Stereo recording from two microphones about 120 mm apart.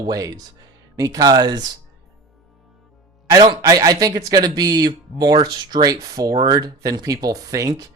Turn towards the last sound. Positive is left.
turn(degrees=-30)  # may be behind; listen again after turning